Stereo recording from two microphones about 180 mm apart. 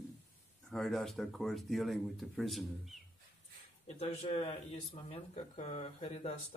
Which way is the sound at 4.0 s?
35° left (ahead or behind).